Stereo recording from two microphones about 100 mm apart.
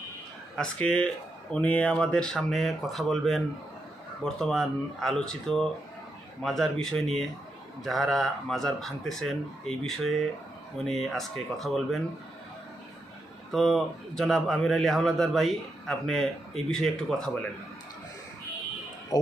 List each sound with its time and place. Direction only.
0.5 s speech: 10° left (ahead or behind)
13.5 s speech: centre (ahead or behind)
19.1 s speech: 40° left (ahead or behind)